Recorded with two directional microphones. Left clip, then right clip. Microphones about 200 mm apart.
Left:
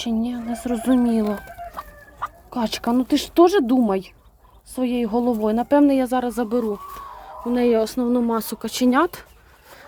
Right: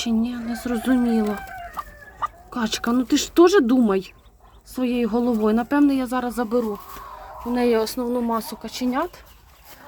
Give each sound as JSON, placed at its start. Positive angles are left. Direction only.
{"t": 0.0, "sound": "speech", "side_deg": 5}
{"t": 1.7, "sound": "chicken", "side_deg": 30}
{"t": 2.5, "sound": "speech", "side_deg": 5}